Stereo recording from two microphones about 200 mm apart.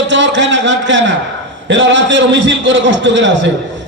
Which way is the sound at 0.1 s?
65° right (ahead or behind).